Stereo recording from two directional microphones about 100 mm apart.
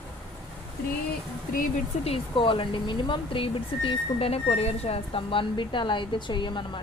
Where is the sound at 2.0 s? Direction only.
70° left (ahead or behind).